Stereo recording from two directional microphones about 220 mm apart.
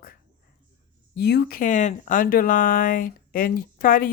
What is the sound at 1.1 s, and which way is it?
Speech, 45° left (ahead or behind).